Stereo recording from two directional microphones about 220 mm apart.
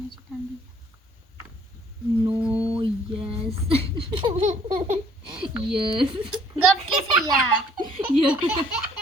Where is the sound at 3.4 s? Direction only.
25° right (ahead or behind).